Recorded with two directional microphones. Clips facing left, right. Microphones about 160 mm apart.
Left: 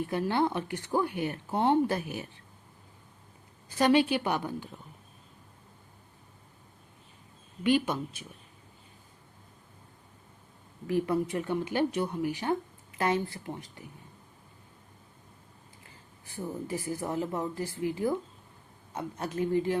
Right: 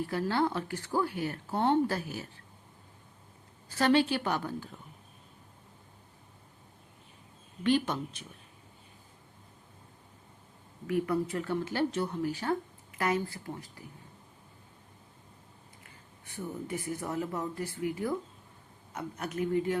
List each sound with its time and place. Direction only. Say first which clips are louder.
0.0 s a woman's voice: left 1 dB; 20° left (ahead or behind)
3.7 s speech: left 2 dB; 15° left (ahead or behind)
7.6 s speech: left 1 dB; 10° left (ahead or behind)
10.8 s speech: left 2 dB; 25° left (ahead or behind)
13.0 s a woman's voice: left 2 dB; 25° left (ahead or behind)
15.8 s a woman's voice: left 1 dB; 30° left (ahead or behind)